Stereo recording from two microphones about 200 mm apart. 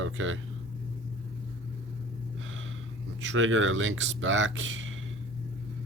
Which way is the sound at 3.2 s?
75° right (ahead or behind).